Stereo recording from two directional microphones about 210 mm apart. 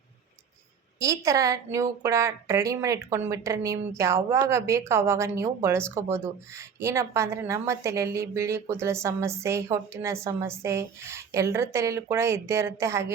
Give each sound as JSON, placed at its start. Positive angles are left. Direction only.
{"t": 0.9, "sound": "a woman's voice", "side_deg": -15}